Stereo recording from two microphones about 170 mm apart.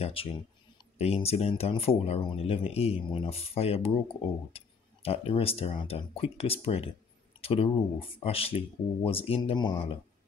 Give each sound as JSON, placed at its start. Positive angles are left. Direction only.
{"t": 0.0, "sound": "speech", "side_deg": 35}